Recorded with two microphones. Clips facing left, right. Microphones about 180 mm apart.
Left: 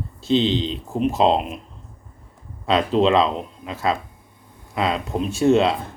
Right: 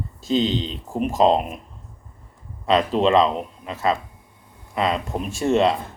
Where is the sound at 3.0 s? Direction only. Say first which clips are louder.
Right 1 dB; 40° right (ahead or behind).